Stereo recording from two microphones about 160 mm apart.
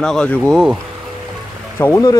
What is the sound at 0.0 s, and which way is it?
Speech, 5° left (ahead or behind).